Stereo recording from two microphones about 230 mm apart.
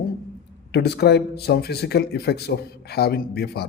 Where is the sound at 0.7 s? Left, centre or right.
Left.